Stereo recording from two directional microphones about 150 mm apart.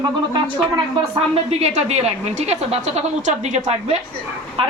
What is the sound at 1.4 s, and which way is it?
A woman's voice, 45° right (ahead or behind).